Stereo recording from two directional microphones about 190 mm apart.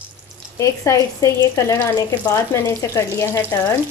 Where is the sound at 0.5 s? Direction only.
15° left (ahead or behind).